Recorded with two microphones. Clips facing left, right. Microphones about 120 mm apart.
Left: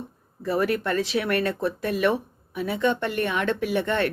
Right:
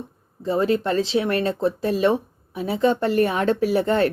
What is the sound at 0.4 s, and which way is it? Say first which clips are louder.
Speech: right 3 dB; 25° right (ahead or behind).